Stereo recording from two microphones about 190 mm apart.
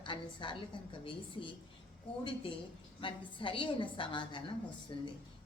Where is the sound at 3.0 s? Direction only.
25° left (ahead or behind).